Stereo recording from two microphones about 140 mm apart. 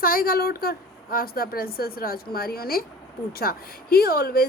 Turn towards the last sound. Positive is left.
turn(degrees=90)